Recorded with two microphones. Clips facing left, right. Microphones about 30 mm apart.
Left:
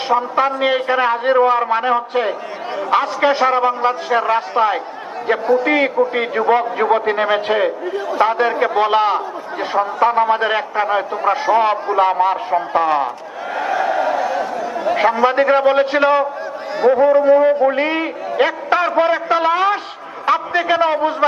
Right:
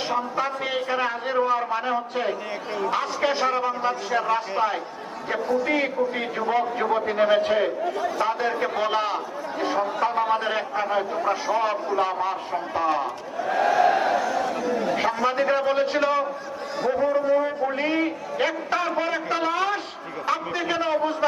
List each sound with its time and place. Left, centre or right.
0.1 s a man's voice: left
14.2 s a sound: left
14.6 s chatter: centre
14.8 s a man's voice: left
17.6 s a man's voice: left
17.8 s a sound: left
18.9 s a man's voice: left